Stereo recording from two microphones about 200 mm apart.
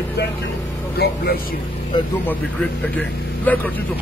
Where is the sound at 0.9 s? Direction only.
50° left (ahead or behind).